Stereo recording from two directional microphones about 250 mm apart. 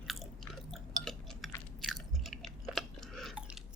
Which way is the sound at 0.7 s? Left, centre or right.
Centre.